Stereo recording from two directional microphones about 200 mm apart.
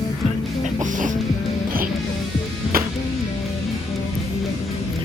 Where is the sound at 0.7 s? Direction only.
40° right (ahead or behind).